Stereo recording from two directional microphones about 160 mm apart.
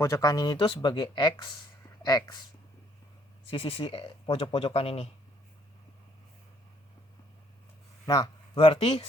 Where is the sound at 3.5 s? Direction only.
35° left (ahead or behind).